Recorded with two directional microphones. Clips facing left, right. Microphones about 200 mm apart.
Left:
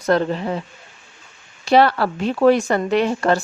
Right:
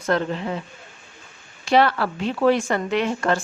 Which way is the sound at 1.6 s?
35° left (ahead or behind).